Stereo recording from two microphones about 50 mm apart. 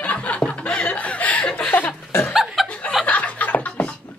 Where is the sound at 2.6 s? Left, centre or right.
Centre.